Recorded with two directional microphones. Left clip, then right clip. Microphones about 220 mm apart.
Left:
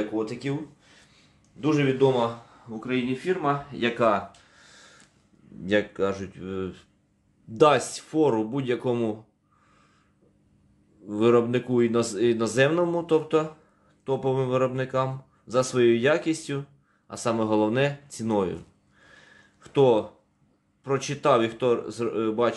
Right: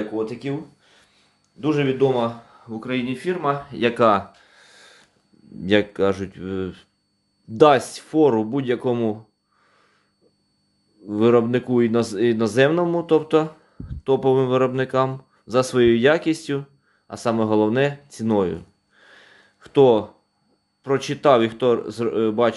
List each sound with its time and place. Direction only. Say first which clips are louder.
0.1 s speech: right 3 dB; 15° right (ahead or behind); by 4.2 s 40° right (ahead or behind)
4.5 s a sound: right 3 dB; 20° right (ahead or behind)
5.7 s speech: right 6 dB; 30° right (ahead or behind)
11.1 s speech: right 4 dB; 20° right (ahead or behind)